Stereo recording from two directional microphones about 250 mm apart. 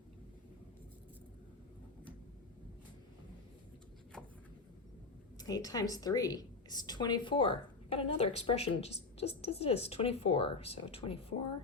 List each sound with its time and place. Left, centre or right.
5.4 s a woman's voice: centre